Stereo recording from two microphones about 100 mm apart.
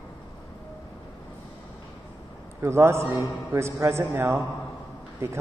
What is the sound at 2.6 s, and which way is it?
A man's voice, 25° right (ahead or behind).